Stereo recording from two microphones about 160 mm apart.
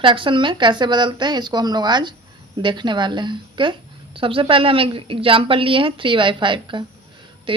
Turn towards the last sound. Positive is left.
turn(degrees=-30)  # may be behind; listen again after turning